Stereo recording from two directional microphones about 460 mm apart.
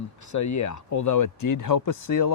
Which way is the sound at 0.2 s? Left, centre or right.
Left.